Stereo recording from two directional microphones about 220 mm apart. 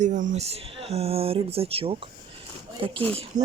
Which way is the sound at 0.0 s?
35° right (ahead or behind).